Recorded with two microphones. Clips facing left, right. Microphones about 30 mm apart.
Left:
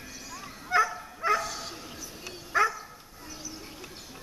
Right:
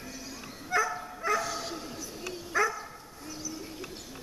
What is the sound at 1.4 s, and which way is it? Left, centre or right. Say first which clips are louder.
Dog: right 1 dB; centre.